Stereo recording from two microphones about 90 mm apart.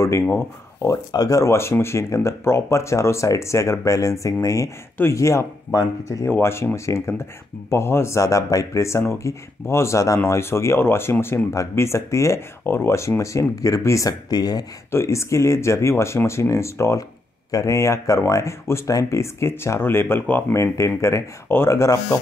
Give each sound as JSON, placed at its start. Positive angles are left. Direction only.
{"t": 0.0, "sound": "speech", "side_deg": 30}
{"t": 1.1, "sound": "speech", "side_deg": 40}
{"t": 14.9, "sound": "speech", "side_deg": 30}